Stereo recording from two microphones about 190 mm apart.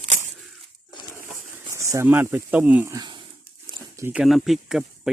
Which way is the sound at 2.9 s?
25° right (ahead or behind).